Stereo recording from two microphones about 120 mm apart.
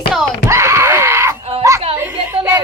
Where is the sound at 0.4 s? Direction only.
25° right (ahead or behind).